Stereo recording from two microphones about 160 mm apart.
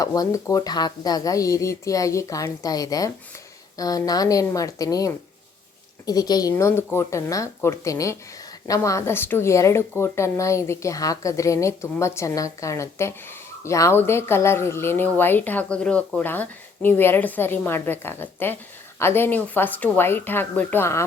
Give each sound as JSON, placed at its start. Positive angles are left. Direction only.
{"t": 0.0, "sound": "a woman's voice", "side_deg": 20}